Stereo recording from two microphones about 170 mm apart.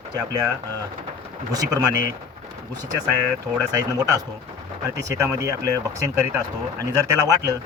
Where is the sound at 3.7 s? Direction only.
20° right (ahead or behind).